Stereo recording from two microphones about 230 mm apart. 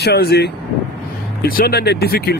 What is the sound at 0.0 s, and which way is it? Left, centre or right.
Speech, left.